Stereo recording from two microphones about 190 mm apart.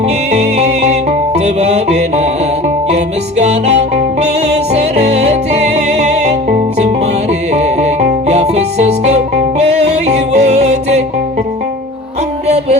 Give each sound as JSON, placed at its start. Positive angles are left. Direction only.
{"t": 0.3, "sound": "music", "side_deg": -35}